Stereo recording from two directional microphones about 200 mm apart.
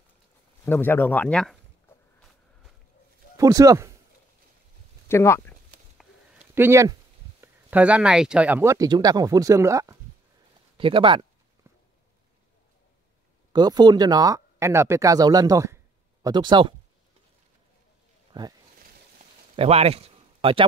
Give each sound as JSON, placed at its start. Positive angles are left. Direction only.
{"t": 0.7, "sound": "speech", "side_deg": 10}
{"t": 3.3, "sound": "speech", "side_deg": -15}
{"t": 5.0, "sound": "speech", "side_deg": 15}
{"t": 6.5, "sound": "speech", "side_deg": -10}
{"t": 10.8, "sound": "speech", "side_deg": -25}
{"t": 13.5, "sound": "speech", "side_deg": -20}
{"t": 18.3, "sound": "speech", "side_deg": -20}
{"t": 19.5, "sound": "a man's voice", "side_deg": -30}